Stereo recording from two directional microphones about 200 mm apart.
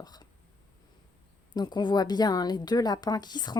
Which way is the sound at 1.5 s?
20° left (ahead or behind).